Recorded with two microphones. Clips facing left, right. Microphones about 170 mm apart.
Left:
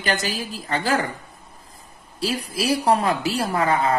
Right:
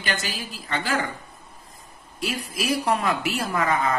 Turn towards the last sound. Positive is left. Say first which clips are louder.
# left 3 dB
turn(degrees=30)  # may be behind; listen again after turning